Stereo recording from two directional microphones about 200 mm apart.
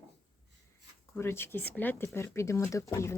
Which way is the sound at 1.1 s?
10° left (ahead or behind).